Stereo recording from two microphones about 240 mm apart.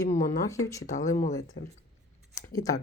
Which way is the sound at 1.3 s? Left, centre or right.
Centre.